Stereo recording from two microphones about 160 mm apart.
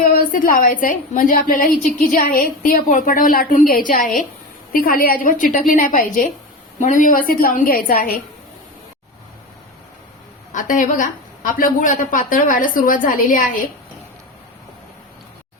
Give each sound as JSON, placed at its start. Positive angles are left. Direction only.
{"t": 0.0, "sound": "a woman's voice", "side_deg": 60}
{"t": 10.5, "sound": "a woman's voice", "side_deg": 55}